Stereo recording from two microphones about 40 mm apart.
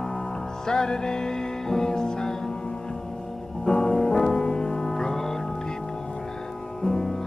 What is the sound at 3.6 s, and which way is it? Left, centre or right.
Music, centre.